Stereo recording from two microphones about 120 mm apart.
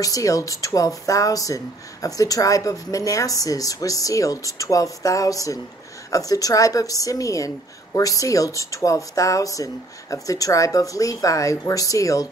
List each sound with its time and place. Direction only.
0.0 s speech: 30° left (ahead or behind)